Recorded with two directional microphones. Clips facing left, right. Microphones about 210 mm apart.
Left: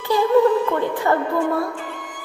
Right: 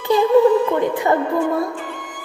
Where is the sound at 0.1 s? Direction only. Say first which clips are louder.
Right 3 dB; 20° right (ahead or behind).